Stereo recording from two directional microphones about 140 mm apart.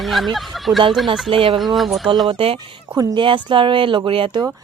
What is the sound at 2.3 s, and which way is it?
Speech, 45° right (ahead or behind).